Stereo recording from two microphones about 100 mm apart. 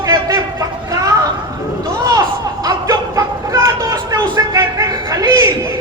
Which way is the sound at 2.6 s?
35° right (ahead or behind).